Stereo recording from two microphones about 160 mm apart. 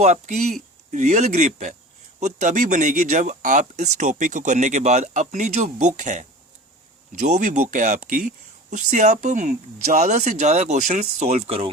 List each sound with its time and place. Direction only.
0.0 s speech: 45° right (ahead or behind)